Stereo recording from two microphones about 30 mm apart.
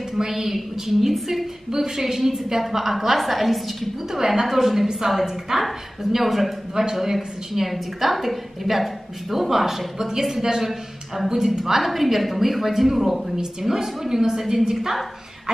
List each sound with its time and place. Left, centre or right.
0.2 s a woman's voice: centre
0.9 s a woman's voice: centre
1.7 s a woman's voice: centre
4.1 s a woman's voice: centre
5.5 s a woman's voice: centre
6.7 s a woman's voice: centre
13.4 s a woman's voice: centre